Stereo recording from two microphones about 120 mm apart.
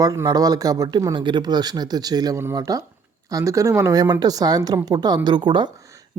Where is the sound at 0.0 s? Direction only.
30° right (ahead or behind).